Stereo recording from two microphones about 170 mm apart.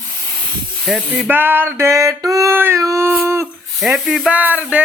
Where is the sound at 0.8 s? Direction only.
5° right (ahead or behind).